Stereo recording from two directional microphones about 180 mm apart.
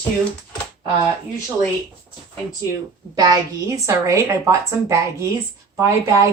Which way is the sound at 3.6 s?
15° right (ahead or behind).